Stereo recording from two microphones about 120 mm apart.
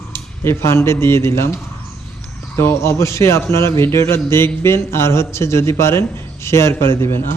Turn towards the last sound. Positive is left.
turn(degrees=20)  # may be behind; listen again after turning